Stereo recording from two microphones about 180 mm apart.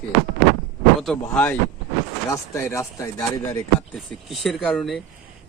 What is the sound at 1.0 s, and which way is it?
Speech, 5° left (ahead or behind).